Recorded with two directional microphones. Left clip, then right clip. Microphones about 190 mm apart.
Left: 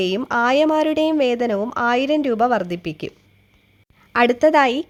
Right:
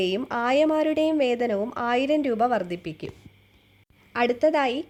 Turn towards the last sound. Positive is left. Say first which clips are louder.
# left 7 dB
turn(degrees=30)  # may be behind; listen again after turning